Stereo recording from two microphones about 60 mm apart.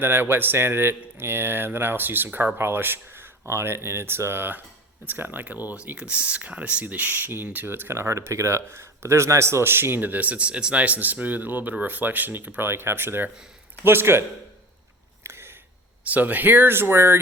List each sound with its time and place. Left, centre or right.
0.0 s speech: right
15.2 s a sound: right
16.0 s speech: right